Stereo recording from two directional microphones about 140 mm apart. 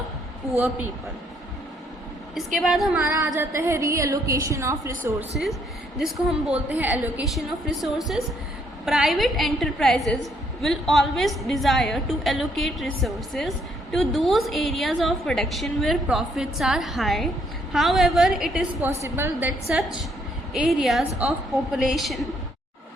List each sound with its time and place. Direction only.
0.5 s a woman's voice: 15° right (ahead or behind)
2.6 s a woman's voice: centre (ahead or behind)
3.3 s a woman's voice: 20° right (ahead or behind)
6.0 s a woman's voice: centre (ahead or behind)
19.0 s a woman's voice: 15° right (ahead or behind); by 22.3 s centre (ahead or behind)